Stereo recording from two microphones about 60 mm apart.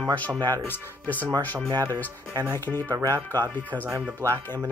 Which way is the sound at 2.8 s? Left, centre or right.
Right.